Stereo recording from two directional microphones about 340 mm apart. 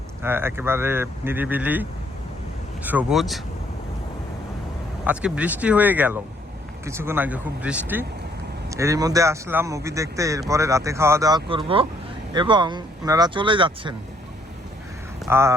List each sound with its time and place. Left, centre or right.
0.2 s speech: centre
5.0 s speech: centre
15.2 s speech: centre